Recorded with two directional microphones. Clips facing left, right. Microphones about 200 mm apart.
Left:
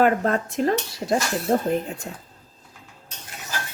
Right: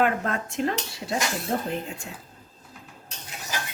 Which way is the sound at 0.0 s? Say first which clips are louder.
Left 5 dB; 35° left (ahead or behind).